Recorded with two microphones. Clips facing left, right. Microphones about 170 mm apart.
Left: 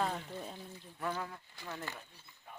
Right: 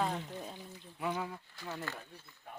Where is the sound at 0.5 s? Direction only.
15° right (ahead or behind).